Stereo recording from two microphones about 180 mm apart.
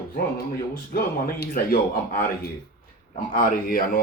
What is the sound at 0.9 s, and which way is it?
Speech, 55° left (ahead or behind).